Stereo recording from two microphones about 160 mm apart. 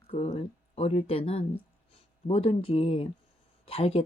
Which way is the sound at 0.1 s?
40° left (ahead or behind).